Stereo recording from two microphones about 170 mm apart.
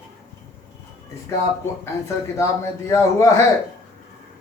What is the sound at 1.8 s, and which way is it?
Speech, 15° left (ahead or behind).